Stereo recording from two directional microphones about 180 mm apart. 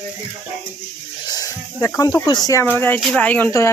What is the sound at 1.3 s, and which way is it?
Speech, 20° left (ahead or behind).